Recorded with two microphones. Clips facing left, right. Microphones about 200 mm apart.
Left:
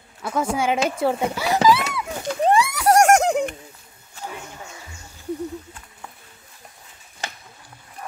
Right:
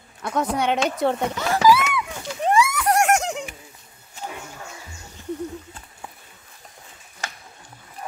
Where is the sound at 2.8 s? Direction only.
45° left (ahead or behind).